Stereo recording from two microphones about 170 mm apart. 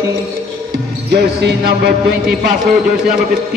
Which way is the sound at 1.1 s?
70° right (ahead or behind).